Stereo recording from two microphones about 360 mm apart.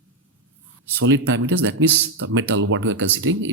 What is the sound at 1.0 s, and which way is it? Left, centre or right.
Speech, right.